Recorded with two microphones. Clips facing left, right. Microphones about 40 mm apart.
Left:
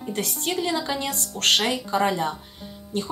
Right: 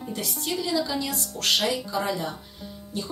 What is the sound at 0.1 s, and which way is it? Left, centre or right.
Speech, left.